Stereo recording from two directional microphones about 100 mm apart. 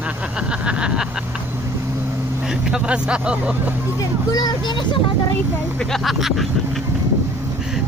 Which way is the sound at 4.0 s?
40° left (ahead or behind).